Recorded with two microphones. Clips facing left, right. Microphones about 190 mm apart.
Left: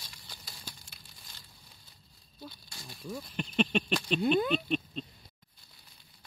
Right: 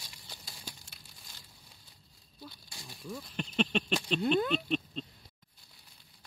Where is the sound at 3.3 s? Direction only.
5° left (ahead or behind).